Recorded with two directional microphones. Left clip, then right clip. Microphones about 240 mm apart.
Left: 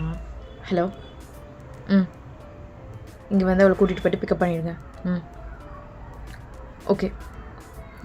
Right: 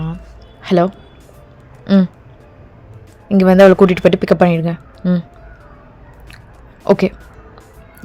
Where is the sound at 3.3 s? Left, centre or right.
Right.